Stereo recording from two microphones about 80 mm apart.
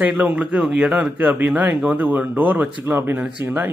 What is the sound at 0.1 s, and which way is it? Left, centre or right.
A man's voice, centre.